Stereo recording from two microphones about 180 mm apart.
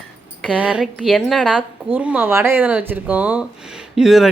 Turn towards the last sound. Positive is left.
turn(degrees=0)  # may be behind; listen again after turning